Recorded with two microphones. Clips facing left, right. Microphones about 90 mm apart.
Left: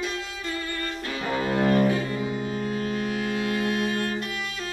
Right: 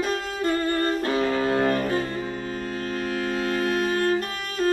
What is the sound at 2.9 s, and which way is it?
Music, 45° right (ahead or behind).